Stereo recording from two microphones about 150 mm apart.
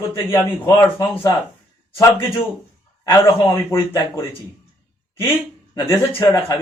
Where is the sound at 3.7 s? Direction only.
15° left (ahead or behind).